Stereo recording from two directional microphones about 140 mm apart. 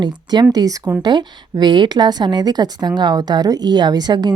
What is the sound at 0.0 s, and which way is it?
Speech, 30° right (ahead or behind).